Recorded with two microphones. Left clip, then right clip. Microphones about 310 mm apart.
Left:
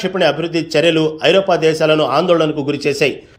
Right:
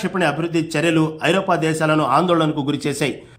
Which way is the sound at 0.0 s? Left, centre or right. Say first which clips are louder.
Left 5 dB; centre.